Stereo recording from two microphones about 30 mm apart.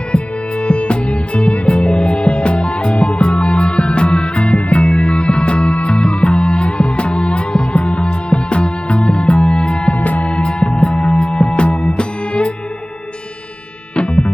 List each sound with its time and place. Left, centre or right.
0.6 s music: left
9.9 s music: left
10.2 s music: left
13.9 s music: left